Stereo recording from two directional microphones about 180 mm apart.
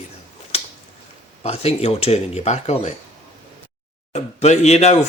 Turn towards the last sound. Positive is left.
turn(degrees=35)  # may be behind; listen again after turning